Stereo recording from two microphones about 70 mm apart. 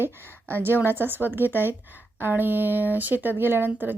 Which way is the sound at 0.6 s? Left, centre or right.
Right.